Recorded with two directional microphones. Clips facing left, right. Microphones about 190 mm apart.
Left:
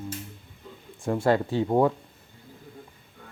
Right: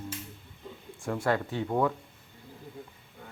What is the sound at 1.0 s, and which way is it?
Speech, 25° left (ahead or behind).